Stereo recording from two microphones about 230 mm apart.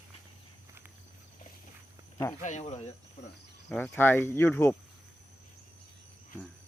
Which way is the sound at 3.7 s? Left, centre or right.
Centre.